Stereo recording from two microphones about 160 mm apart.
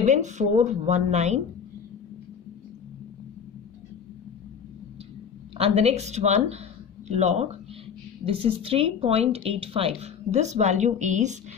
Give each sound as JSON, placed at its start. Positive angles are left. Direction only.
{"t": 0.0, "sound": "speech", "side_deg": -50}
{"t": 5.6, "sound": "a woman's voice", "side_deg": -40}